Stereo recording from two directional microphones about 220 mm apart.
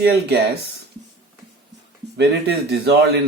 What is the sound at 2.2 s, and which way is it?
Speech, 50° right (ahead or behind).